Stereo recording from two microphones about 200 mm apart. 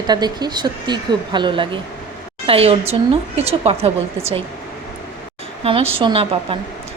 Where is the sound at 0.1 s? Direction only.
20° right (ahead or behind).